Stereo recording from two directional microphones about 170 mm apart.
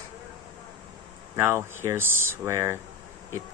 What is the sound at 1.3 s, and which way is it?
Speech, 15° right (ahead or behind).